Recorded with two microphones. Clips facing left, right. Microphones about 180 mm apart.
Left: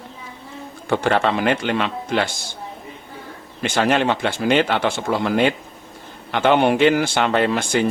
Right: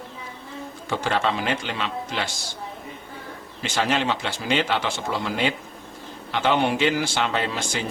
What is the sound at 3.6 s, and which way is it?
Speech, 55° left (ahead or behind).